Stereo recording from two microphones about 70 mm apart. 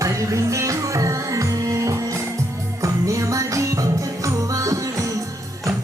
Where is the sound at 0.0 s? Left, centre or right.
Right.